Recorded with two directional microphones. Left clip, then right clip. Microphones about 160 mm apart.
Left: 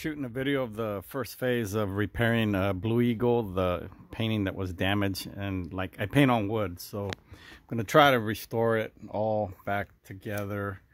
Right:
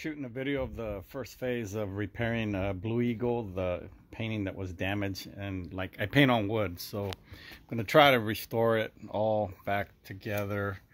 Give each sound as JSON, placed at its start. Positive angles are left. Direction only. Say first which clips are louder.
{"t": 0.0, "sound": "speech", "louder": "left 4 dB", "side_deg": 45}